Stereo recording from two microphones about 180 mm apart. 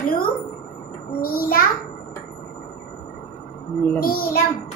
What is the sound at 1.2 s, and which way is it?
Speech, 55° left (ahead or behind).